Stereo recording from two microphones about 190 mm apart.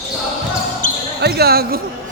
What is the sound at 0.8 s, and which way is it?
Basketball bounce, 40° left (ahead or behind).